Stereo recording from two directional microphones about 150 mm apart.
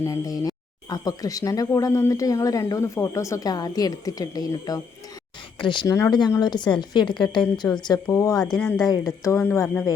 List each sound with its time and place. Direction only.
0.0 s speech: 20° left (ahead or behind)